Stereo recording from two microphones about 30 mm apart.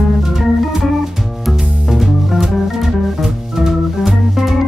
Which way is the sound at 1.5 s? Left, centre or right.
Centre.